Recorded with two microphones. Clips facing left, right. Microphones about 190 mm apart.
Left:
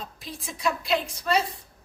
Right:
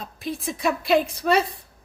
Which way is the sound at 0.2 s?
55° right (ahead or behind).